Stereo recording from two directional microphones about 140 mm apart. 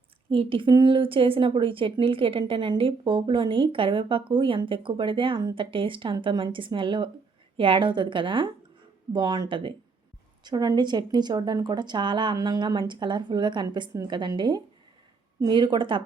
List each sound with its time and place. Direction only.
0.3 s speech: 40° right (ahead or behind)